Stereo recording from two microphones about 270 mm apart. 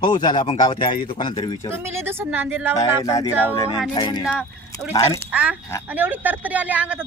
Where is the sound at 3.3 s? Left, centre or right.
Centre.